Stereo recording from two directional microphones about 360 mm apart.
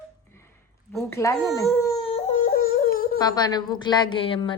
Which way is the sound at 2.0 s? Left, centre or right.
Centre.